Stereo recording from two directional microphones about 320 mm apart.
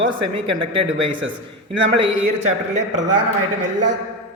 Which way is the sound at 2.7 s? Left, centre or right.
Right.